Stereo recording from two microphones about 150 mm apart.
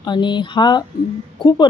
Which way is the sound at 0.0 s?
30° left (ahead or behind).